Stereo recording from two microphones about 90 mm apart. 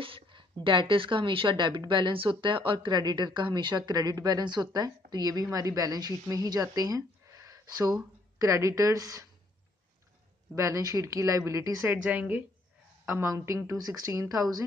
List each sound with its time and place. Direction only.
0.0 s speech: 70° right (ahead or behind); by 9.3 s 45° right (ahead or behind)
10.5 s speech: 40° right (ahead or behind)
11.9 s a woman's voice: 15° right (ahead or behind)
13.0 s speech: 30° right (ahead or behind)